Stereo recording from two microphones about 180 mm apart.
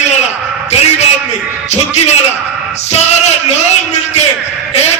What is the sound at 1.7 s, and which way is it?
A man's voice, 40° left (ahead or behind).